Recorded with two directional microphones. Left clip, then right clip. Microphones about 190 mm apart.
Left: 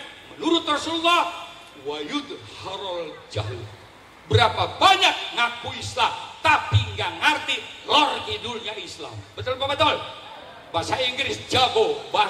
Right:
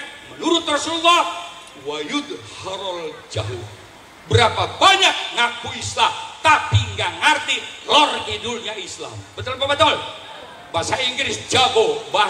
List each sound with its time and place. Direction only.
0.4 s a man's voice: 15° left (ahead or behind)